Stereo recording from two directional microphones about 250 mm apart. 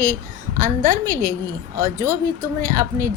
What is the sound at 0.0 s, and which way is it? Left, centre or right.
A woman's voice, right.